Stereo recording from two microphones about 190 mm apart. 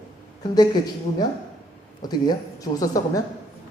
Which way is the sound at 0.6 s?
20° left (ahead or behind).